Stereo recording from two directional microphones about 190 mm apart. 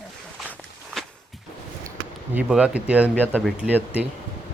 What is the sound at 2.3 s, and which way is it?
Speech, 5° right (ahead or behind).